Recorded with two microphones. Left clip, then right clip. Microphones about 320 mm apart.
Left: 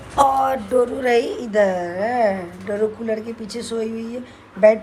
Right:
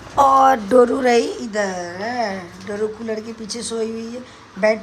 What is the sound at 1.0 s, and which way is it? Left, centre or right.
Speech, centre.